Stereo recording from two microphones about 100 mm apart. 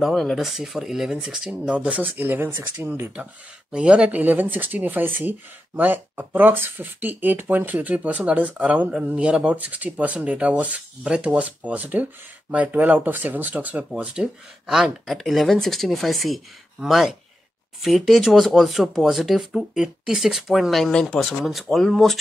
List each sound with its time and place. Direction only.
0.0 s speech: centre (ahead or behind)